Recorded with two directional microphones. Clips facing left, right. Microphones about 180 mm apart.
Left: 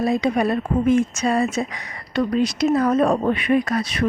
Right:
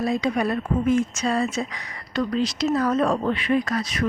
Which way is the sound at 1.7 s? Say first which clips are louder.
Left 2 dB; 25° left (ahead or behind).